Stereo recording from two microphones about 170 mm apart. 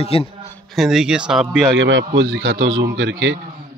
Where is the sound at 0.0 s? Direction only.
35° left (ahead or behind).